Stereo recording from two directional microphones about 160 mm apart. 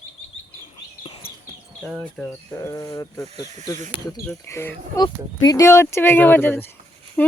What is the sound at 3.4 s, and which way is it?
Speech, 45° right (ahead or behind).